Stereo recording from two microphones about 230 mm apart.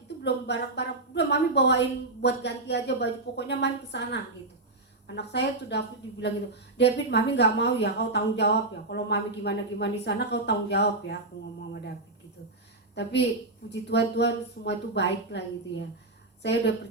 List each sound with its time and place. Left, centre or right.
0.2 s a woman's voice: left
13.7 s a woman's voice: left